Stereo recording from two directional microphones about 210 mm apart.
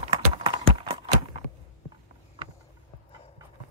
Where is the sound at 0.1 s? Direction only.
30° right (ahead or behind).